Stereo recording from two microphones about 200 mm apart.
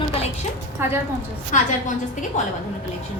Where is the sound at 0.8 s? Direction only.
10° right (ahead or behind).